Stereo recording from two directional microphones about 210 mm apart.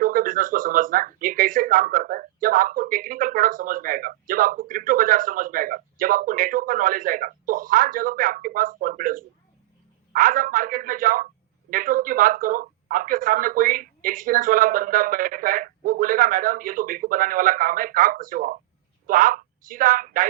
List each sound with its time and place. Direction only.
0.0 s a woman's voice: 40° right (ahead or behind)